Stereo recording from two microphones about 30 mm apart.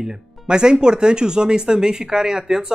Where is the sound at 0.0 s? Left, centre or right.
Right.